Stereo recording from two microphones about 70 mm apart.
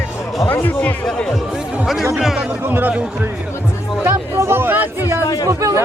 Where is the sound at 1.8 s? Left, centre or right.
Centre.